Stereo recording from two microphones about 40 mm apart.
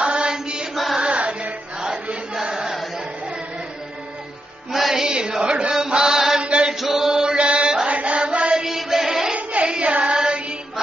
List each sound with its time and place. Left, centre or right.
0.0 s chant: right
1.0 s music: right
2.4 s chant: right
4.7 s music: centre
5.0 s chant: centre
6.4 s chant: right
6.7 s chant: centre
7.1 s chant: right
7.8 s music: right
8.6 s music: centre
9.3 s singing: right
10.1 s music: centre